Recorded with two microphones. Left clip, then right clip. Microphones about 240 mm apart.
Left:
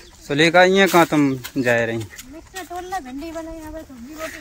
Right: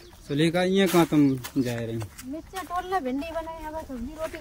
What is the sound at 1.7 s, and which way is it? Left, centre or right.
Speech, left.